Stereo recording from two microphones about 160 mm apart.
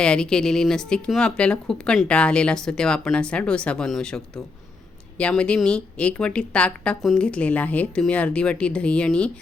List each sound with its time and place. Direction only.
0.0 s a woman's voice: 5° left (ahead or behind)